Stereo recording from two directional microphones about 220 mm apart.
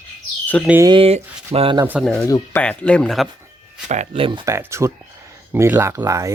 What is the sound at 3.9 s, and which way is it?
Speech, 30° right (ahead or behind).